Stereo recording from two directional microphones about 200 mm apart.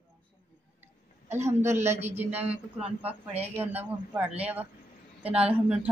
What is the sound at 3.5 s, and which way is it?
Speech, 10° right (ahead or behind).